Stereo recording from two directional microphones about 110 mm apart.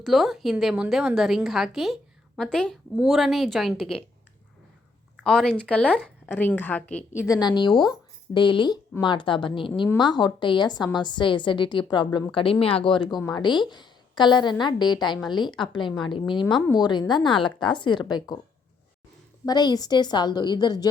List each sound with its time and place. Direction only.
0.0 s a woman's voice: centre (ahead or behind)
5.2 s a woman's voice: 5° left (ahead or behind)
7.3 s a woman's voice: 40° left (ahead or behind)
19.5 s speech: 35° left (ahead or behind)